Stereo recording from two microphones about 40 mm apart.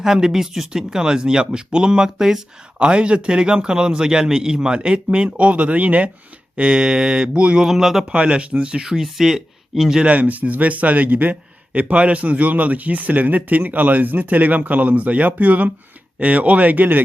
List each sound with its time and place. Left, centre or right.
0.0 s speech: centre
2.7 s a man's voice: right
6.6 s a man's voice: right
7.6 s speech: centre
8.0 s a man's voice: right
8.8 s speech: centre
10.1 s a man's voice: right